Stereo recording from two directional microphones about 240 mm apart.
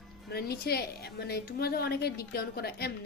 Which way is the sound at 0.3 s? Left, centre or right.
Left.